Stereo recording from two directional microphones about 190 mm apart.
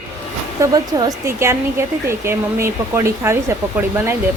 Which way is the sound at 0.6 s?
20° right (ahead or behind).